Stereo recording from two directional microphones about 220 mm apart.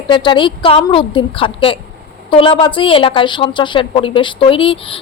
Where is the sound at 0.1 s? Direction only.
20° left (ahead or behind).